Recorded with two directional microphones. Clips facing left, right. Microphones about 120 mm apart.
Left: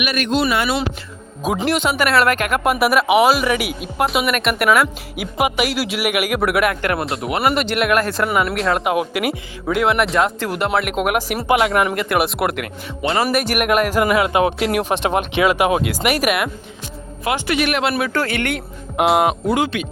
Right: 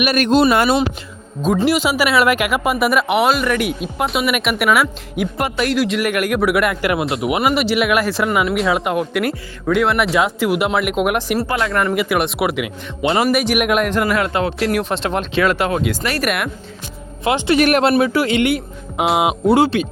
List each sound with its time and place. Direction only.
0.0 s speech: 40° right (ahead or behind)
1.4 s speech: 10° left (ahead or behind)
1.6 s a man's voice: 5° right (ahead or behind)
17.2 s speech: 25° right (ahead or behind)
17.6 s speech: 40° right (ahead or behind)
18.1 s speech: 15° right (ahead or behind)
18.4 s a man's voice: centre (ahead or behind)
19.5 s speech: 30° right (ahead or behind)